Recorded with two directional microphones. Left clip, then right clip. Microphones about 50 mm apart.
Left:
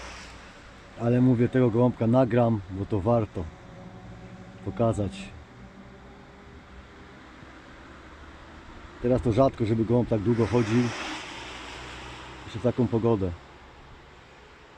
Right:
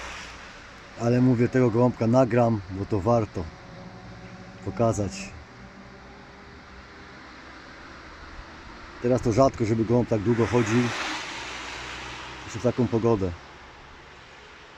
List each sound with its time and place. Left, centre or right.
0.0 s a sound: right
0.9 s speech: centre
4.8 s speech: centre
9.0 s speech: centre